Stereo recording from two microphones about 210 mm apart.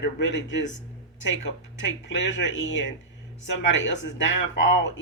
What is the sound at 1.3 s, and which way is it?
Speech, 60° left (ahead or behind).